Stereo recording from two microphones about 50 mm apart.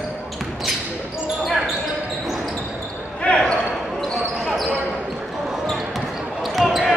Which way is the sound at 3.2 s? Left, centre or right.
Centre.